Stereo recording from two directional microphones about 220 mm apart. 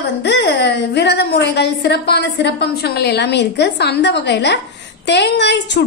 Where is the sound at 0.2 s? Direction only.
50° left (ahead or behind).